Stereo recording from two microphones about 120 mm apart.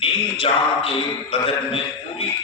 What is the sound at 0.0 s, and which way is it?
A man's voice, 50° left (ahead or behind).